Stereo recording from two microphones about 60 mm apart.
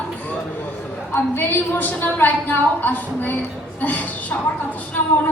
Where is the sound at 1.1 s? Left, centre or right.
Left.